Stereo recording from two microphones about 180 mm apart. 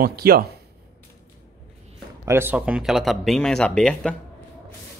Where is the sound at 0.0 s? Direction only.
60° right (ahead or behind).